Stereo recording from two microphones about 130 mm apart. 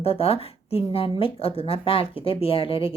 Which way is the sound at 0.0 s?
50° left (ahead or behind).